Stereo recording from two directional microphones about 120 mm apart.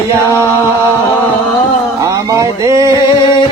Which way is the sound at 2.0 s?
30° right (ahead or behind).